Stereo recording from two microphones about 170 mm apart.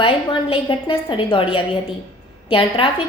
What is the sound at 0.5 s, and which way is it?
A woman's voice, 30° left (ahead or behind).